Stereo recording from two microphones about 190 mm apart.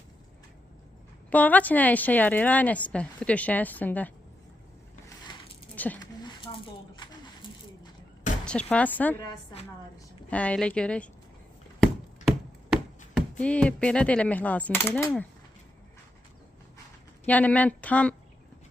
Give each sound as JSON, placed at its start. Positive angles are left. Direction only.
{"t": 1.3, "sound": "a woman's voice", "side_deg": 10}
{"t": 5.7, "sound": "a sound", "side_deg": 10}
{"t": 6.0, "sound": "a sound", "side_deg": 25}
{"t": 8.4, "sound": "a woman's voice", "side_deg": 5}
{"t": 10.2, "sound": "a woman's voice", "side_deg": 5}
{"t": 13.1, "sound": "a woman's voice", "side_deg": 5}
{"t": 17.2, "sound": "a woman's voice", "side_deg": 10}